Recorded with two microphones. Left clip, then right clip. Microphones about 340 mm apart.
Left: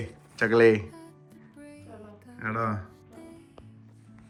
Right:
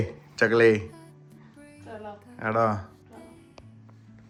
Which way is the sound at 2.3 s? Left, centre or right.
Centre.